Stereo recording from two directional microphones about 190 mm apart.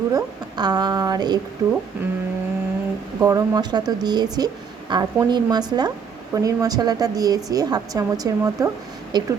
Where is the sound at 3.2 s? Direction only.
15° right (ahead or behind).